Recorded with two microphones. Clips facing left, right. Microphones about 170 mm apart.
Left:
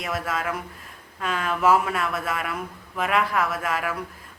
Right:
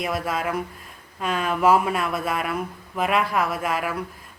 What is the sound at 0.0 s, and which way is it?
A woman's voice, 15° right (ahead or behind).